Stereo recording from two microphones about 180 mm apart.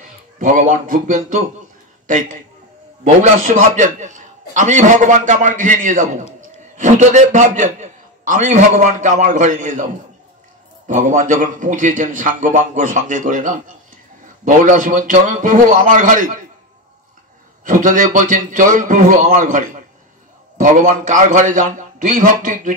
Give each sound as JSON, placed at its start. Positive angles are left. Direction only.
{"t": 0.4, "sound": "a man's voice", "side_deg": -45}
{"t": 10.9, "sound": "a man's voice", "side_deg": -45}
{"t": 17.6, "sound": "a man's voice", "side_deg": -45}